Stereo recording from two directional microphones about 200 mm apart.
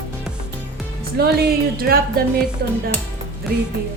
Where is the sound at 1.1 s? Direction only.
50° right (ahead or behind).